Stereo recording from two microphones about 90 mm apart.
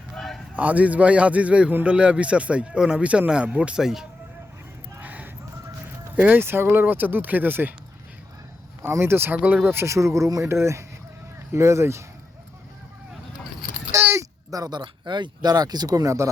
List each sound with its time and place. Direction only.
0.1 s a sound: centre (ahead or behind)
0.5 s a man's voice: 15° right (ahead or behind)
4.9 s a sound: 20° right (ahead or behind)
5.8 s chicken: 20° right (ahead or behind)
6.4 s speech: 25° right (ahead or behind)
8.8 s speech: 25° right (ahead or behind)
14.2 s speech: 45° right (ahead or behind)